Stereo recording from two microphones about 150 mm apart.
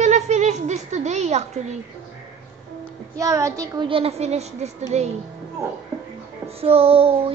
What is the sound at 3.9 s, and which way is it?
Speech, 40° right (ahead or behind).